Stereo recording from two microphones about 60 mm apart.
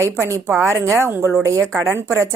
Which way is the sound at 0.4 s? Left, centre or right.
Right.